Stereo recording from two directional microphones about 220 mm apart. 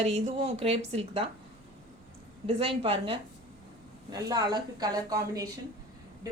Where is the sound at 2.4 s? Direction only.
25° right (ahead or behind).